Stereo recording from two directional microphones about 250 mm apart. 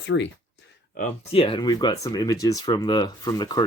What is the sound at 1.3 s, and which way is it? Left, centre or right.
Speech, left.